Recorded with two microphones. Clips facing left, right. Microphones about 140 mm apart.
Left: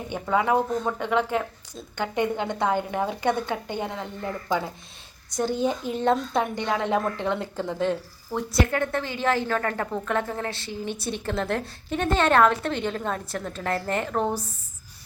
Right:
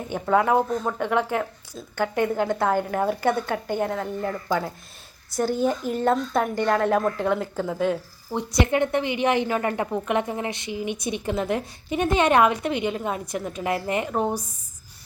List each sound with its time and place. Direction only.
0.1 s speech: centre (ahead or behind)
5.4 s speech: 5° right (ahead or behind)
8.4 s a woman's voice: 20° right (ahead or behind)